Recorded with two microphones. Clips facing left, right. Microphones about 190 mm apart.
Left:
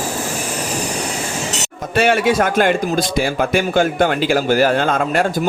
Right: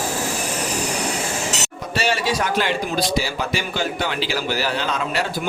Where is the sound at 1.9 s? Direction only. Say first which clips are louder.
Left 7 dB; 55° left (ahead or behind).